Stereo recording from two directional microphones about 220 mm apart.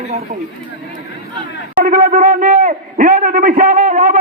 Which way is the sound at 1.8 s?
40° right (ahead or behind).